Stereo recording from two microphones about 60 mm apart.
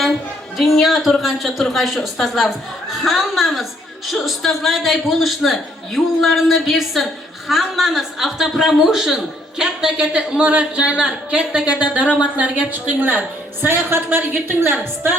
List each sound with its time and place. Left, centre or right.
0.5 s a man's voice: centre; by 15.1 s right